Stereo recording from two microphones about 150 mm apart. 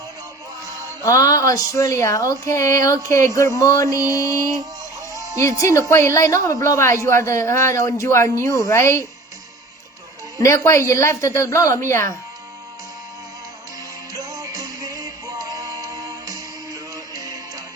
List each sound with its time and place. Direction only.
1.0 s a woman's voice: 20° left (ahead or behind)
10.4 s a woman's voice: 20° left (ahead or behind)
14.1 s music: 25° right (ahead or behind)